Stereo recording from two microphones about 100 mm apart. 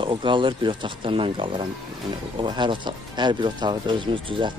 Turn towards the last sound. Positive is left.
turn(degrees=-60)  # may be behind; listen again after turning